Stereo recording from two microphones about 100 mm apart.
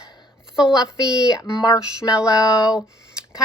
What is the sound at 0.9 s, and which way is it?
Speech, 35° left (ahead or behind).